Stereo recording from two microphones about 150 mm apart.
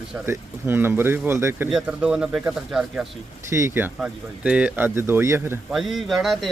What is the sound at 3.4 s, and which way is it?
Speech, 20° right (ahead or behind).